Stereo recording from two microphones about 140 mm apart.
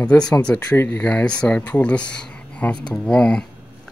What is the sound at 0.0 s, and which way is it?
Speech, 10° left (ahead or behind).